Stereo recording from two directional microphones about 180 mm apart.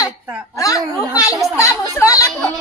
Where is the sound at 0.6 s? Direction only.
20° left (ahead or behind).